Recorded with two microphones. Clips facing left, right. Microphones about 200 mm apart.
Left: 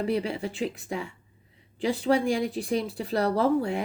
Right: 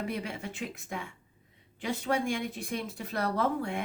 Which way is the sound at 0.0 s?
30° left (ahead or behind).